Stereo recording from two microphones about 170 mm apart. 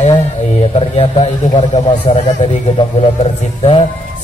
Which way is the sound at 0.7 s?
35° left (ahead or behind).